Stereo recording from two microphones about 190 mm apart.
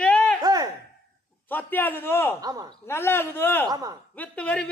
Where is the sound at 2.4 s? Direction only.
20° right (ahead or behind).